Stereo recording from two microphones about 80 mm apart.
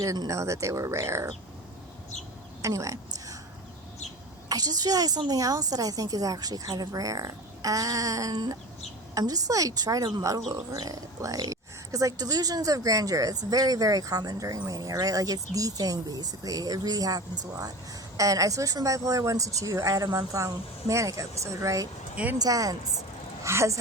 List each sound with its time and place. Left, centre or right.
0.0 s speech: right
2.6 s a sound: right
4.4 s a woman's voice: right
22.1 s speech: centre
22.4 s a woman's voice: right
23.4 s a woman's voice: right